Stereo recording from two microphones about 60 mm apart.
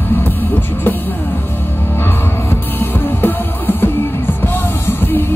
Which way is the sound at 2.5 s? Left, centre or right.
Left.